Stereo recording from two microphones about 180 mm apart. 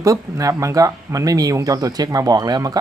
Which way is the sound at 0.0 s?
20° right (ahead or behind).